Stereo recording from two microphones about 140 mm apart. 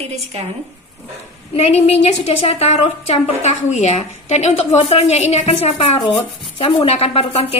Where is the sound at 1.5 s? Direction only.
50° left (ahead or behind).